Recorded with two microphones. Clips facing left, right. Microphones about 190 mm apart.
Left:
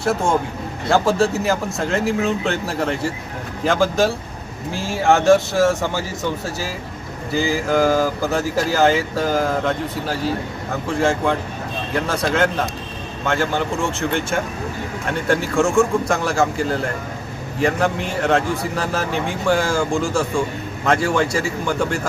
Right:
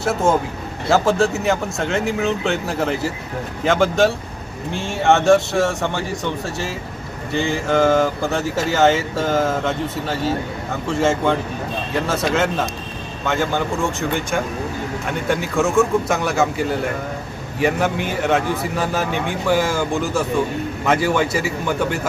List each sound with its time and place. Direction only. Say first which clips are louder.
0.0 s speech: right 1 dB; centre (ahead or behind)
15.3 s speech: left 1 dB; centre (ahead or behind)